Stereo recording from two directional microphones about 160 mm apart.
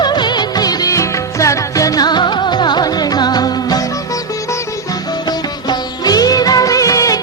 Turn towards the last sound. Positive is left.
turn(degrees=20)  # may be behind; listen again after turning